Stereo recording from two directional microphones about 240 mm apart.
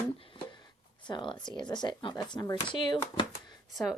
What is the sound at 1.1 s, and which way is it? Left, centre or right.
Speech, centre.